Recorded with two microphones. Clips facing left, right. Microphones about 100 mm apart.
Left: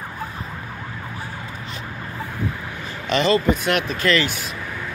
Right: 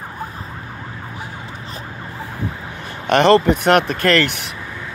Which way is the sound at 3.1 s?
60° right (ahead or behind).